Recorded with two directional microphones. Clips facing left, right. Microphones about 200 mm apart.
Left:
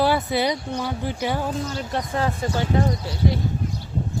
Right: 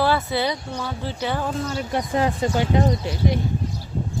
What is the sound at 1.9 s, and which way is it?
Speech, 15° right (ahead or behind).